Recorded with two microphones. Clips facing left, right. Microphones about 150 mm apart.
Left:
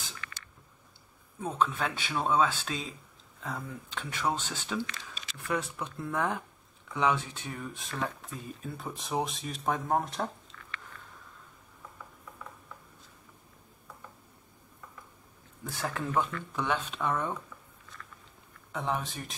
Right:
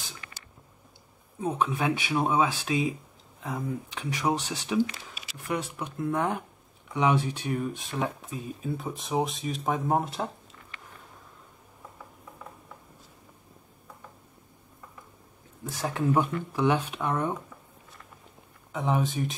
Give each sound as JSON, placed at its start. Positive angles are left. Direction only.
{"t": 1.4, "sound": "speech", "side_deg": -15}
{"t": 8.6, "sound": "speech", "side_deg": 0}
{"t": 15.6, "sound": "speech", "side_deg": -20}
{"t": 18.7, "sound": "speech", "side_deg": 0}